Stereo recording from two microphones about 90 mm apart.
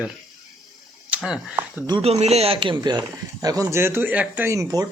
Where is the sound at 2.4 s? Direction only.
75° right (ahead or behind).